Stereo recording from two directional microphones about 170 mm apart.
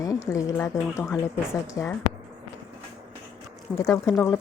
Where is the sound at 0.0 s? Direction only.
20° left (ahead or behind).